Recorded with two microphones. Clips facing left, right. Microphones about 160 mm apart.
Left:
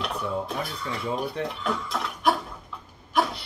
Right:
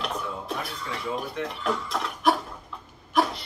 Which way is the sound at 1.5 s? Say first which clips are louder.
Right 1 dB; centre (ahead or behind).